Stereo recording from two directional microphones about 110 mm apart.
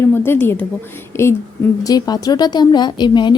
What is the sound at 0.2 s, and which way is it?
Speech, 20° left (ahead or behind).